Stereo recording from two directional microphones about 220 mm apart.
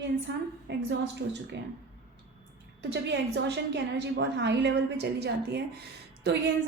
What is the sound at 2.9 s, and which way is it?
A woman's voice, 50° right (ahead or behind).